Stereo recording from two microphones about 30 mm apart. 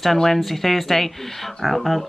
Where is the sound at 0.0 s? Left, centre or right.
Centre.